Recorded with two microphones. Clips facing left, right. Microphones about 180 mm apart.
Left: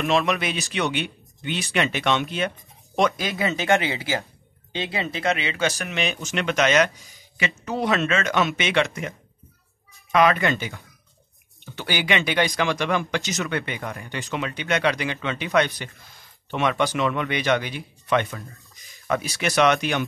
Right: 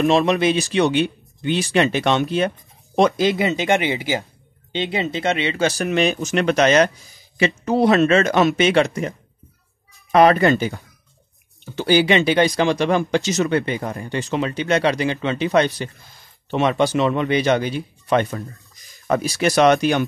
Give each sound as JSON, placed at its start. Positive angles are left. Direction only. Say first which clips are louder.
{"t": 0.0, "sound": "speech", "louder": "right 6 dB", "side_deg": -35}
{"t": 3.3, "sound": "speech", "louder": "right 3 dB", "side_deg": -20}
{"t": 10.1, "sound": "speech", "louder": "right 6 dB", "side_deg": -40}